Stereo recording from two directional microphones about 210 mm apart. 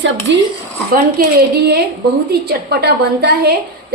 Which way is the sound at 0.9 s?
50° right (ahead or behind).